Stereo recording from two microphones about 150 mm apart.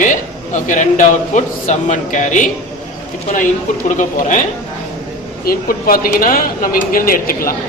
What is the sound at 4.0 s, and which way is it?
Speech, 60° left (ahead or behind).